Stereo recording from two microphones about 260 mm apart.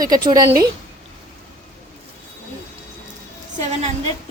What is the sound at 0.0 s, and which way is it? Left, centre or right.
Speech, centre.